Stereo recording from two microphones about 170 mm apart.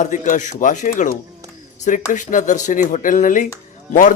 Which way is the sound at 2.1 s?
45° left (ahead or behind).